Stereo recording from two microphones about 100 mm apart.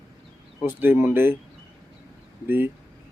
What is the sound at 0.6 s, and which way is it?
Speech, 20° right (ahead or behind).